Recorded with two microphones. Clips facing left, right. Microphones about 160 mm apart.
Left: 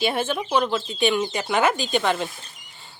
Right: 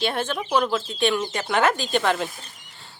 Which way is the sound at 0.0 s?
5° left (ahead or behind).